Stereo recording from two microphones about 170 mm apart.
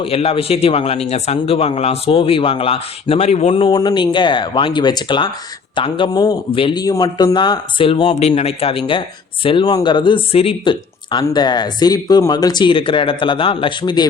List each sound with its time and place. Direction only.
0.0 s a man's voice: 35° left (ahead or behind)